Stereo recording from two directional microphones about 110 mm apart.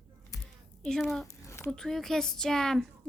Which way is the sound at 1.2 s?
25° left (ahead or behind).